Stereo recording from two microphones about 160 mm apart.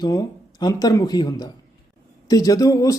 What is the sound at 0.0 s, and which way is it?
Speech, 25° left (ahead or behind).